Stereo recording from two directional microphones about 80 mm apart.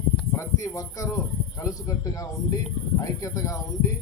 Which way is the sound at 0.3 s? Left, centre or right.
Left.